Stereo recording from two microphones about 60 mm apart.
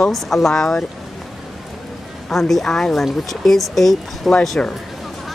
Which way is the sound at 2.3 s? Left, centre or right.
Centre.